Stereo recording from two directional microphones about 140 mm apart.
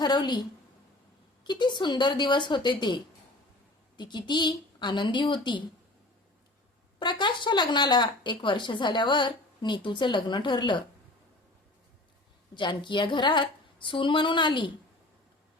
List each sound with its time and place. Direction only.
0.0 s a woman's voice: 30° left (ahead or behind)
1.5 s a woman's voice: 35° left (ahead or behind)
7.0 s a woman's voice: 30° left (ahead or behind)
12.5 s a woman's voice: 35° left (ahead or behind)